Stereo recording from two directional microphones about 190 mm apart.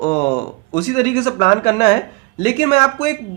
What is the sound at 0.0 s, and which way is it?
Speech, 35° left (ahead or behind).